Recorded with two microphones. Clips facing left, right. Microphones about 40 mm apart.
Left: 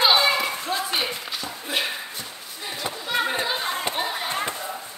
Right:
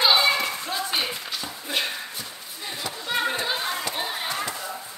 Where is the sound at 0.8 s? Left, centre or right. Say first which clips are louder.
Left 1 dB; centre.